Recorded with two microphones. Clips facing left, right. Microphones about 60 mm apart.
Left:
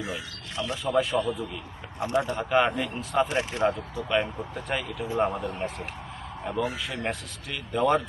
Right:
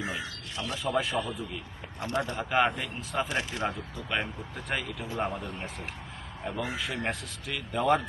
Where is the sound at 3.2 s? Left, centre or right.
Left.